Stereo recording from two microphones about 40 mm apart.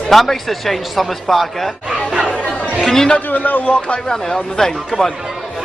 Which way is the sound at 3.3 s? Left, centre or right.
Left.